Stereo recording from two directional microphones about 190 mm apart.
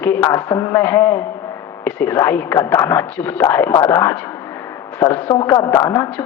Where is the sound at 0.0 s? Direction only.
10° left (ahead or behind).